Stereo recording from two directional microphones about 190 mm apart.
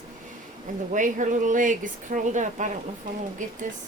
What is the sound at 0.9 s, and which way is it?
A child's voice, 40° right (ahead or behind).